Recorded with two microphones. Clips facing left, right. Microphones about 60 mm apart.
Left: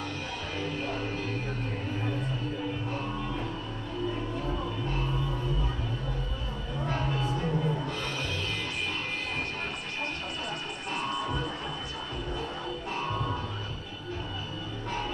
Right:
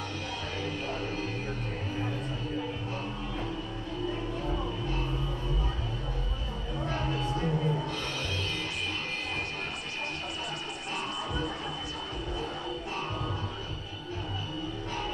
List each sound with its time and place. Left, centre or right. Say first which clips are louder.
0.7 s music: left 1 dB; left
6.8 s a sound: left 1 dB; centre
7.2 s music: even; centre
11.1 s music: left 2 dB; centre